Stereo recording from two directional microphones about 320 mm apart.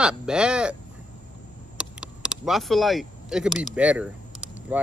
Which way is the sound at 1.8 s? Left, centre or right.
Centre.